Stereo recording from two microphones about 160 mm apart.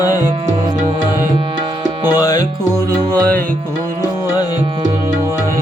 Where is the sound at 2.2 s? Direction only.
25° left (ahead or behind).